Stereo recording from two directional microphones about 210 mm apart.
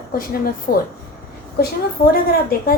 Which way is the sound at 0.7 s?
45° left (ahead or behind).